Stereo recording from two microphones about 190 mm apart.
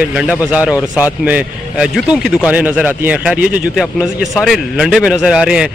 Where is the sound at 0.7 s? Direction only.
15° left (ahead or behind).